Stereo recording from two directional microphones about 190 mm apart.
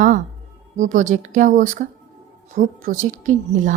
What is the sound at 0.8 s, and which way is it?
A woman's voice, 40° right (ahead or behind).